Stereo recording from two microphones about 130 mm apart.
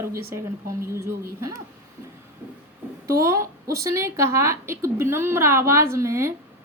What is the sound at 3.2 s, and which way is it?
A woman's voice, 25° right (ahead or behind).